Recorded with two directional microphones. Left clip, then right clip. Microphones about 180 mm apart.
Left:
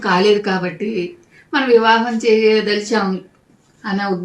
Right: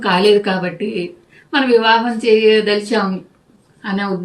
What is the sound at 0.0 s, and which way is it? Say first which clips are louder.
A woman's voice: right 2 dB; 30° right (ahead or behind).